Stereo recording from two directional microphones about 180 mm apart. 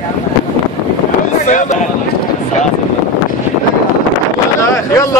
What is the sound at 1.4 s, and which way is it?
Speech, 40° left (ahead or behind).